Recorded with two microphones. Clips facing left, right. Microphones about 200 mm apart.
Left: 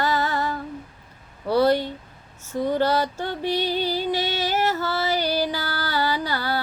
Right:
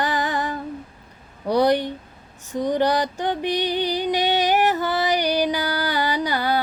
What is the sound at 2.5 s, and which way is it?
Female singing, 15° right (ahead or behind).